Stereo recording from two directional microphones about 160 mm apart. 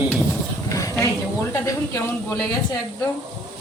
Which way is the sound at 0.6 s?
20° left (ahead or behind).